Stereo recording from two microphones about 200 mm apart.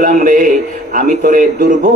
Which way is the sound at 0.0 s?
40° right (ahead or behind).